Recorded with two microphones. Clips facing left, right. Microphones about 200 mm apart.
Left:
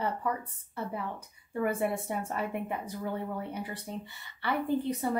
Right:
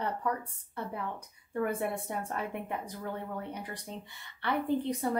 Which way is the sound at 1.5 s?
5° left (ahead or behind).